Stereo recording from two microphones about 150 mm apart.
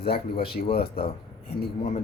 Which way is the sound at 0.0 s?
90° left.